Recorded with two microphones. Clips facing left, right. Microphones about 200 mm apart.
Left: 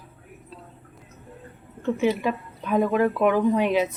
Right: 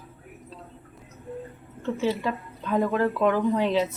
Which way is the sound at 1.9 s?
15° left (ahead or behind).